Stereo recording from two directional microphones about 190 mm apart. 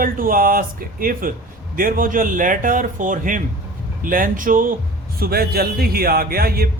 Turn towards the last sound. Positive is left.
turn(degrees=-55)  # may be behind; listen again after turning